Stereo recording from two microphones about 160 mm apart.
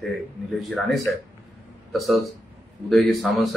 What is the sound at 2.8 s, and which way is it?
Speech, centre (ahead or behind).